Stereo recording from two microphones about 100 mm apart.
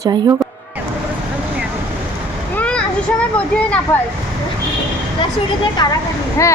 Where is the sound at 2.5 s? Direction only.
10° left (ahead or behind).